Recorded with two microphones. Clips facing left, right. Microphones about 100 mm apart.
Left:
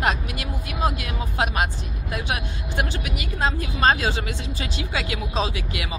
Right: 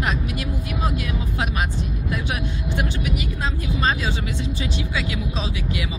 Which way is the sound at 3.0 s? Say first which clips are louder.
Left 1 dB; 65° left (ahead or behind).